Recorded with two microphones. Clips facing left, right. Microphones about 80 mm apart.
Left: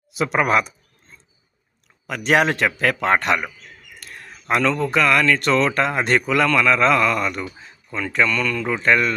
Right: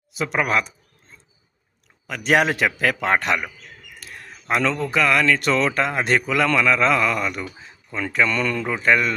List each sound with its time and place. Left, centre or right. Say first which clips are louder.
0.1 s speech: left 3 dB; centre
2.0 s speech: left 1 dB; centre
4.0 s a sound: left 2 dB; centre
4.8 s speech: left 2 dB; centre
8.3 s speech: even; right
8.6 s mantra: left 1 dB; centre